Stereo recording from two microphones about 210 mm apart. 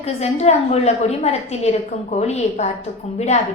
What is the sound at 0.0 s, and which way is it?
A woman's voice, 30° left (ahead or behind).